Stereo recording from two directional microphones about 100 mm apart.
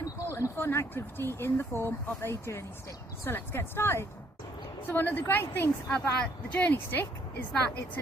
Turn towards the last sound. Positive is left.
turn(degrees=15)  # may be behind; listen again after turning